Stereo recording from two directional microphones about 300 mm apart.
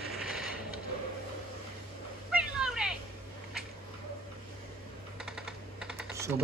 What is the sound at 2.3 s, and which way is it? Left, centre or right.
Cat, centre.